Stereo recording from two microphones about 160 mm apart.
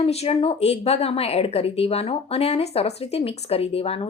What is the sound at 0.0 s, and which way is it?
A woman's voice, 40° left (ahead or behind).